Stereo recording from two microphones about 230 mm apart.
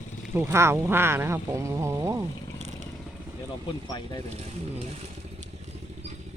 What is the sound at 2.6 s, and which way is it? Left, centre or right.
Motorcycle, right.